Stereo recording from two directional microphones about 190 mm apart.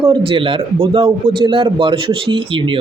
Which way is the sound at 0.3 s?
30° right (ahead or behind).